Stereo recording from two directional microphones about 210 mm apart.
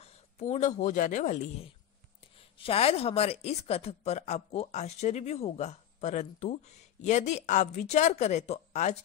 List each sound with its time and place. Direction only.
0.0 s speech: 35° left (ahead or behind)